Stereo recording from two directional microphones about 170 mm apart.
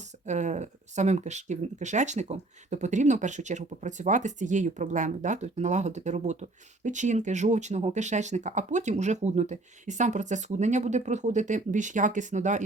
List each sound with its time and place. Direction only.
0.3 s speech: 45° right (ahead or behind)